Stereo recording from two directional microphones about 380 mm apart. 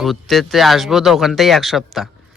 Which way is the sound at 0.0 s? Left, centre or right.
Centre.